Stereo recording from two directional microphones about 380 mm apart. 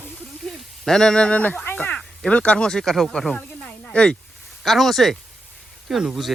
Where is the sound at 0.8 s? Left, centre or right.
Centre.